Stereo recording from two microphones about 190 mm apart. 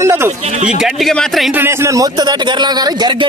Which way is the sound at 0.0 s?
15° right (ahead or behind).